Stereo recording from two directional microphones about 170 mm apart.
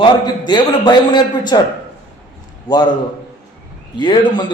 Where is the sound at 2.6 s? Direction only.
25° left (ahead or behind).